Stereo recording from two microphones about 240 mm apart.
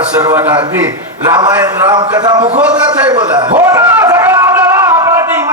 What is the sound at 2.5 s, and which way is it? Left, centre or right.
Speech, centre.